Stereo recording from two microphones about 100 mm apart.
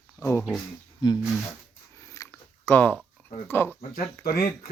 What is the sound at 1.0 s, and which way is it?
Speech, 45° left (ahead or behind).